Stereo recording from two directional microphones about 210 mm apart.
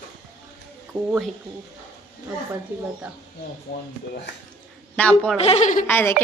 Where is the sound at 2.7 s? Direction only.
10° right (ahead or behind).